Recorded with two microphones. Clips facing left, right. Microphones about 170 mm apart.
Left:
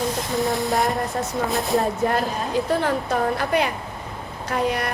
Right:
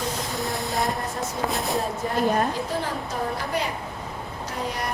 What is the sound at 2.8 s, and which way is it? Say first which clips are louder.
A woman's voice: left 7 dB; 65° left (ahead or behind).